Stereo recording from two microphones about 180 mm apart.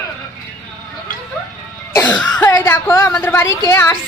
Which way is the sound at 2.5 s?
10° left (ahead or behind).